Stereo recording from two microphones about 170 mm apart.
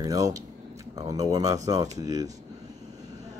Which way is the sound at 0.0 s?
20° right (ahead or behind).